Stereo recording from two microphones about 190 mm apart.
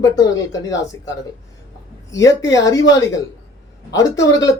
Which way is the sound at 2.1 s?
15° left (ahead or behind).